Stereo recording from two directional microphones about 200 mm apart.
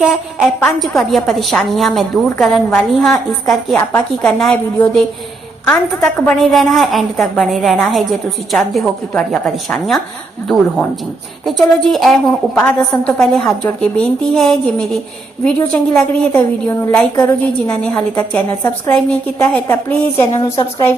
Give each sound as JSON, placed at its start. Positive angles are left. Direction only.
{"t": 0.6, "sound": "a woman's voice", "side_deg": 0}
{"t": 11.4, "sound": "a woman's voice", "side_deg": 0}
{"t": 20.3, "sound": "a woman's voice", "side_deg": 25}